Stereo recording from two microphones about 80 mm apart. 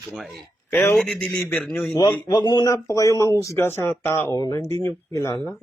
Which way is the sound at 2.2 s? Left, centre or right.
Left.